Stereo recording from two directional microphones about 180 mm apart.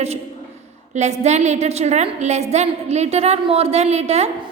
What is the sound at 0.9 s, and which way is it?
A woman's voice, 40° right (ahead or behind).